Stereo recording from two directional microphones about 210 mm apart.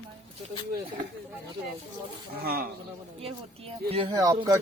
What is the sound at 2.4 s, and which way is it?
Speech, 45° right (ahead or behind).